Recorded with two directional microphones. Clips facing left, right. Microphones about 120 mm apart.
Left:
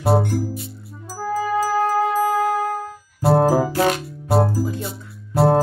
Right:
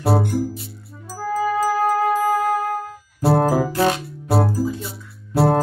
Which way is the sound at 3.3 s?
30° left (ahead or behind).